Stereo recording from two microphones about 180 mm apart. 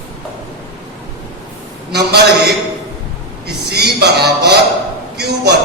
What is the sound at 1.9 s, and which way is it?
A man's voice, 65° right (ahead or behind).